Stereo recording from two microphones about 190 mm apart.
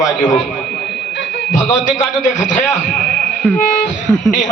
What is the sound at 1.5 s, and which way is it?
A man's voice, 40° left (ahead or behind).